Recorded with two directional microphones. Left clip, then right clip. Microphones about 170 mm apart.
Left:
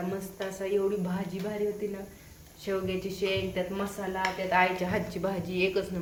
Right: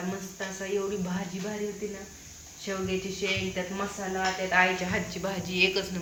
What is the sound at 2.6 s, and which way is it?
Speech, 90° left.